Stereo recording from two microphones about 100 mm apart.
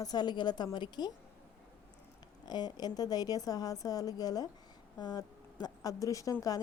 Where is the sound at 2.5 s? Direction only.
45° left (ahead or behind).